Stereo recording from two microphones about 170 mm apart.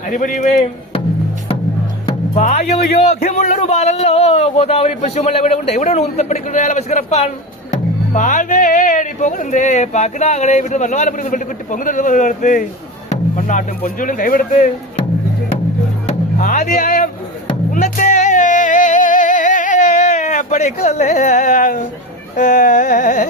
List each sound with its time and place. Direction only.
0.1 s speech: 50° left (ahead or behind)
2.3 s a man's voice: 45° left (ahead or behind)
16.0 s music: 50° left (ahead or behind)
22.4 s speech: 50° left (ahead or behind)